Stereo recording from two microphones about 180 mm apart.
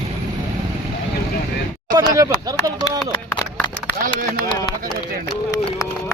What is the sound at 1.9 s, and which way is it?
Speech, 20° right (ahead or behind).